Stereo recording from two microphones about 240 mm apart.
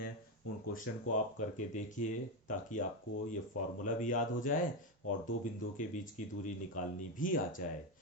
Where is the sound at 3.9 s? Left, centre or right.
Left.